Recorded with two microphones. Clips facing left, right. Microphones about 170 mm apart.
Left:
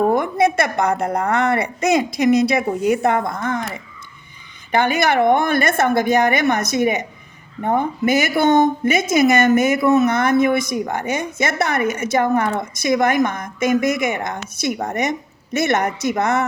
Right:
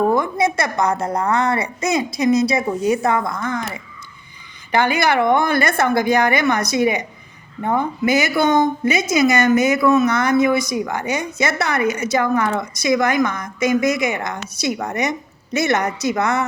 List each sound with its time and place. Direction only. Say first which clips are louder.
0.1 s a woman's voice: left 1 dB; 60° left (ahead or behind)
4.7 s speech: even; 50° left (ahead or behind)